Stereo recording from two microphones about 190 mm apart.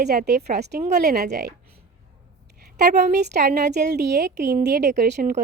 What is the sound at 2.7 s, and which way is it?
Speech, 60° right (ahead or behind).